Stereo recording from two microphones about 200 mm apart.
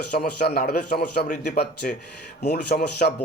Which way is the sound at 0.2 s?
50° left (ahead or behind).